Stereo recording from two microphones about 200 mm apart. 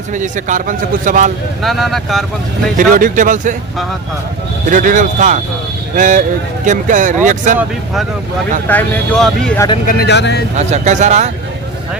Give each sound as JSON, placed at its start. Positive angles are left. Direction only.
{"t": 0.1, "sound": "a man's voice", "side_deg": -40}
{"t": 1.6, "sound": "speech", "side_deg": 0}
{"t": 2.7, "sound": "a man's voice", "side_deg": -40}
{"t": 4.7, "sound": "a man's voice", "side_deg": -40}
{"t": 8.6, "sound": "speech", "side_deg": 5}
{"t": 9.8, "sound": "speech", "side_deg": 55}
{"t": 10.6, "sound": "a man's voice", "side_deg": -35}